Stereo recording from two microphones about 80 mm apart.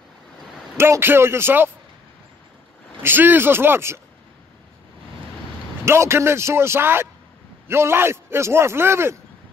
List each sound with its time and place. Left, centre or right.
0.7 s a man's voice: right
3.0 s speech: right
5.9 s a man's voice: right